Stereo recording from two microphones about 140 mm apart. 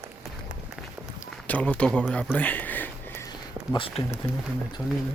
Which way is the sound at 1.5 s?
10° left (ahead or behind).